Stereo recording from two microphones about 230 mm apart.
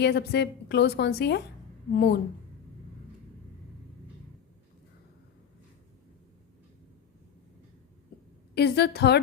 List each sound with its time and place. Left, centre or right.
0.0 s a woman's voice: left
8.5 s a woman's voice: left